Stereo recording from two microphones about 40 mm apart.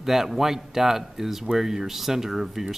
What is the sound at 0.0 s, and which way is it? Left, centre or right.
Speech, centre.